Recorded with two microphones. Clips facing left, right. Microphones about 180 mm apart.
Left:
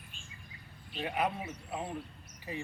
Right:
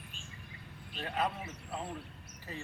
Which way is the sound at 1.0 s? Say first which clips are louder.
Left 2 dB; 10° left (ahead or behind).